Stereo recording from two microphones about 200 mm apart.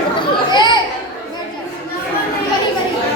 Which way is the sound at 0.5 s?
20° left (ahead or behind).